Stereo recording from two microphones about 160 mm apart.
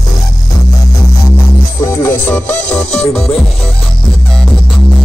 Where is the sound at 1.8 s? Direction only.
15° left (ahead or behind).